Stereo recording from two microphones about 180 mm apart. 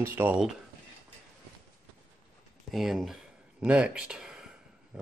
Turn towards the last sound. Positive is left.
turn(degrees=-5)  # may be behind; listen again after turning